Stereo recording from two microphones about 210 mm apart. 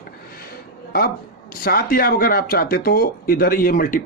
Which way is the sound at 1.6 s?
45° left (ahead or behind).